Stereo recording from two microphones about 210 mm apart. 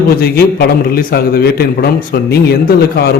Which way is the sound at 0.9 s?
45° left (ahead or behind).